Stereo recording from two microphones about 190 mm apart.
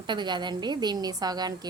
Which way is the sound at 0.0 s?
25° right (ahead or behind).